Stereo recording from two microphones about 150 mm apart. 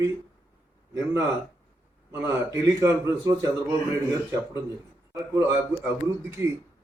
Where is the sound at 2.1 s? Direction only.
20° right (ahead or behind).